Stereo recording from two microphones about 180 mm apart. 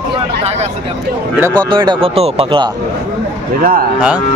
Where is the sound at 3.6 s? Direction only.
50° right (ahead or behind).